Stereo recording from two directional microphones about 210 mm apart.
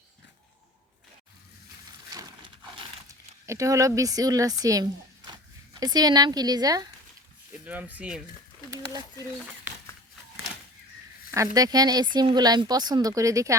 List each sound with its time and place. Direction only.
3.4 s a woman's voice: 15° right (ahead or behind)
7.6 s speech: 5° right (ahead or behind)
8.7 s speech: 15° right (ahead or behind)
11.5 s a woman's voice: 15° right (ahead or behind)